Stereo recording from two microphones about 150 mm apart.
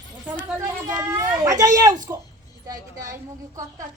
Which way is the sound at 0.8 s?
20° right (ahead or behind).